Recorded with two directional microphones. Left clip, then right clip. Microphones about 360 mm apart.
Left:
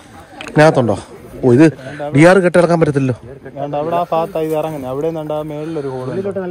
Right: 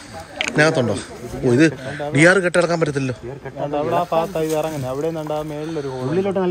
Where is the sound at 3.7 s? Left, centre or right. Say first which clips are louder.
Left 3 dB; left.